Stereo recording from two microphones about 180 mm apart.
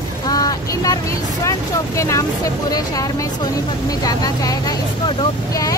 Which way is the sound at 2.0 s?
15° left (ahead or behind).